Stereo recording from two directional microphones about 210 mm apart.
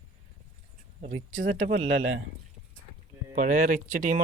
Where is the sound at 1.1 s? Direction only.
70° right (ahead or behind).